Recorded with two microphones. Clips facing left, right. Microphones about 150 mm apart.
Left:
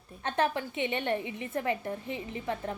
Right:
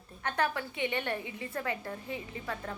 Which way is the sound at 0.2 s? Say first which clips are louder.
Left 3 dB; 25° left (ahead or behind).